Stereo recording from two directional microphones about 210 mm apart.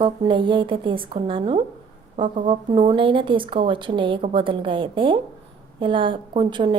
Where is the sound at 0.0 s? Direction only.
25° right (ahead or behind).